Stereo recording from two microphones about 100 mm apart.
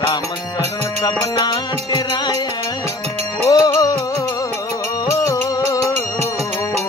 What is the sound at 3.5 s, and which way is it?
Music, 40° left (ahead or behind).